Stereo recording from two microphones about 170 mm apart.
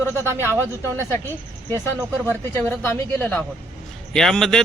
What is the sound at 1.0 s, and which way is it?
A man's voice, 15° left (ahead or behind).